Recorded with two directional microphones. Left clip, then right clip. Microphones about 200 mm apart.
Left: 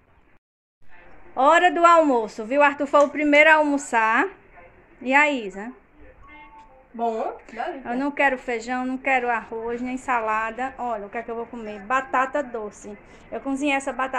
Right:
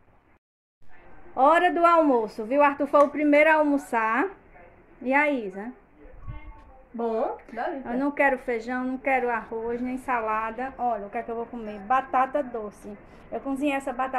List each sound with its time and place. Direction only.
1.3 s a woman's voice: centre (ahead or behind)
7.4 s a woman's voice: centre (ahead or behind)